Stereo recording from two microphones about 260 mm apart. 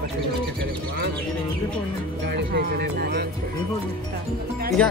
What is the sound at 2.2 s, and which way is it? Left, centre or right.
Speech, right.